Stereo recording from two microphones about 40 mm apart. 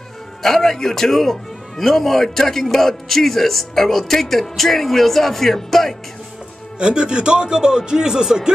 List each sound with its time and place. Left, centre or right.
0.4 s a man's voice: centre
6.8 s speech: right